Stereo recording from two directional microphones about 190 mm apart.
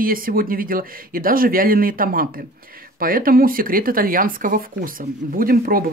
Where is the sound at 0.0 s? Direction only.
50° right (ahead or behind).